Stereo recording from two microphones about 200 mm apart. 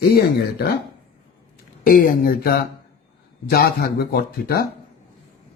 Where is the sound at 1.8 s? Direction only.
45° left (ahead or behind).